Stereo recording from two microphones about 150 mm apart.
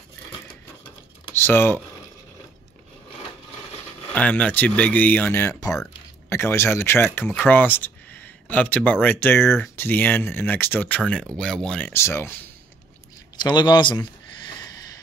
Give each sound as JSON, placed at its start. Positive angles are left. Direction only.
{"t": 1.3, "sound": "speech", "side_deg": 15}
{"t": 4.1, "sound": "speech", "side_deg": 10}
{"t": 11.9, "sound": "speech", "side_deg": 15}
{"t": 13.4, "sound": "speech", "side_deg": 30}